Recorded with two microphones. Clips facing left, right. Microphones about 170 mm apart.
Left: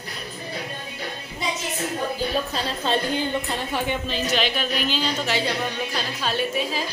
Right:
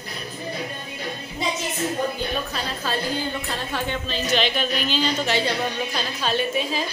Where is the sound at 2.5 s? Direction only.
25° left (ahead or behind).